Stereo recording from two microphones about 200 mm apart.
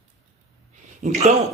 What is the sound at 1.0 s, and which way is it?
Speech, 35° right (ahead or behind).